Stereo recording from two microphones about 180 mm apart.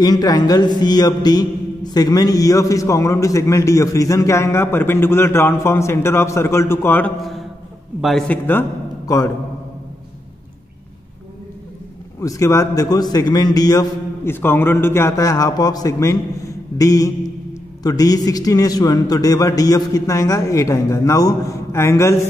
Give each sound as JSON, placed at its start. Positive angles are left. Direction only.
{"t": 0.0, "sound": "mantra", "side_deg": 20}
{"t": 7.2, "sound": "a man's voice", "side_deg": 0}
{"t": 12.2, "sound": "a man's voice", "side_deg": 15}